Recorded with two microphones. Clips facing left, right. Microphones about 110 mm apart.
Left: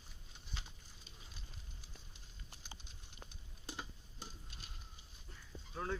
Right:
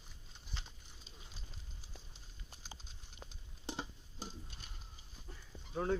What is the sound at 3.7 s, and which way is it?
Tick-tock, 25° right (ahead or behind).